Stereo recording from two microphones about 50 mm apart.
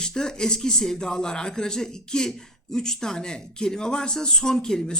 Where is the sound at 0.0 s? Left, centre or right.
Centre.